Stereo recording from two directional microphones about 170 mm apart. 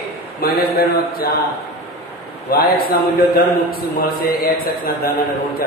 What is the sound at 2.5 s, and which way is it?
Speech, 60° left (ahead or behind).